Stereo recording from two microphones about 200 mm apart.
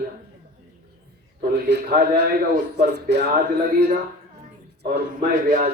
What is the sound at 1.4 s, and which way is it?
Speech, 55° right (ahead or behind).